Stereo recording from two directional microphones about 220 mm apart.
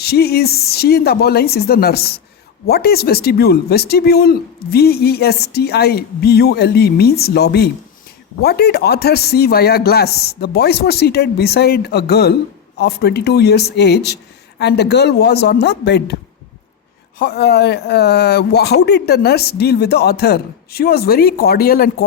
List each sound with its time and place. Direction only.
0.0 s speech: 45° left (ahead or behind)
17.2 s speech: 45° left (ahead or behind)